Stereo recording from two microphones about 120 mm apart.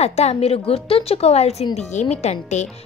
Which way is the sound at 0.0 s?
65° left (ahead or behind).